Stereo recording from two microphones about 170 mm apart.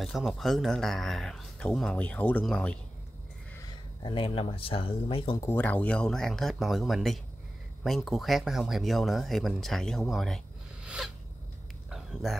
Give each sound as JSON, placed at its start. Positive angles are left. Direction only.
{"t": 0.0, "sound": "speech", "side_deg": 0}
{"t": 3.5, "sound": "speech", "side_deg": 25}
{"t": 5.4, "sound": "speech", "side_deg": 10}
{"t": 11.9, "sound": "a sound", "side_deg": 0}